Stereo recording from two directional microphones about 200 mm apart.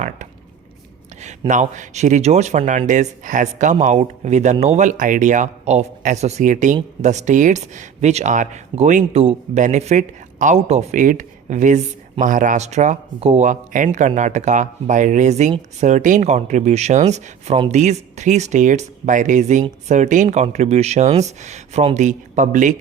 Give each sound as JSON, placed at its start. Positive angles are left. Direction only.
{"t": 1.2, "sound": "speech", "side_deg": -35}